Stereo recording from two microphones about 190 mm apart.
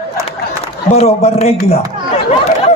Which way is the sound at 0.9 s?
35° left (ahead or behind).